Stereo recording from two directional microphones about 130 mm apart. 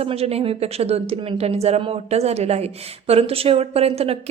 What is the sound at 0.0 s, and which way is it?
A woman's voice, 50° right (ahead or behind).